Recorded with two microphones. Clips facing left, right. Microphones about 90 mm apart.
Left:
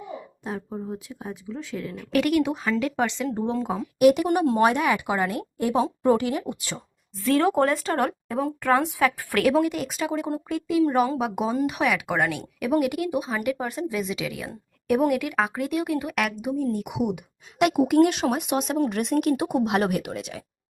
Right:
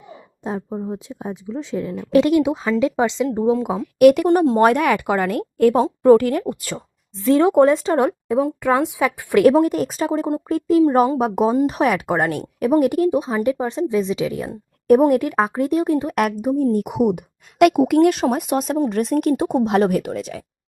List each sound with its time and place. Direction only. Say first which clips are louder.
0.4 s speech: right 7 dB; 30° right (ahead or behind); by 3.8 s 15° right (ahead or behind)
3.9 s speech: right 6 dB; 55° right (ahead or behind)
7.2 s speech: right 7 dB; 25° right (ahead or behind)
9.4 s speech: right 7 dB; 35° right (ahead or behind); by 17.9 s 50° right (ahead or behind)
18.0 s speech: right 5 dB; 40° right (ahead or behind)